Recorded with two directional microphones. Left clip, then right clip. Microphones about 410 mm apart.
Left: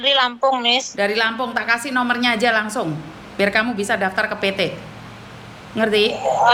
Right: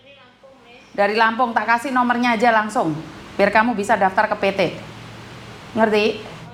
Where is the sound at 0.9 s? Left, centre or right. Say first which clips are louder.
Right 2 dB; centre.